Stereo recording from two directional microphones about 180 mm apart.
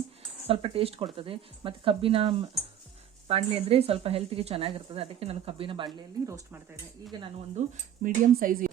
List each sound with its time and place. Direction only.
0.4 s speech: 30° right (ahead or behind)
6.2 s stir: 15° right (ahead or behind)
7.6 s speech: 40° right (ahead or behind)